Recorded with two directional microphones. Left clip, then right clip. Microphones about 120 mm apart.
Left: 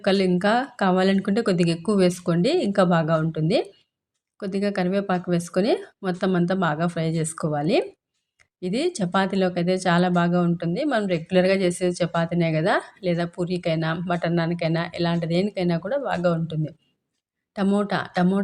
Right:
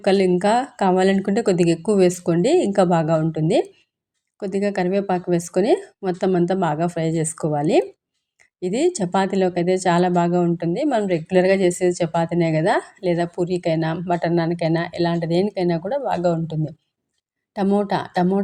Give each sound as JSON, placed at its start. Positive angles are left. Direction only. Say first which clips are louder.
{"t": 0.0, "sound": "a woman's voice", "louder": "right 4 dB", "side_deg": -35}